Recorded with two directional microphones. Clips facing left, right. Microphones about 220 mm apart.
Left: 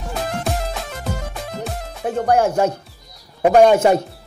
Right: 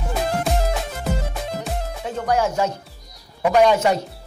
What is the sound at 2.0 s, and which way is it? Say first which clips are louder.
A man's voice: left 5 dB; 55° left (ahead or behind).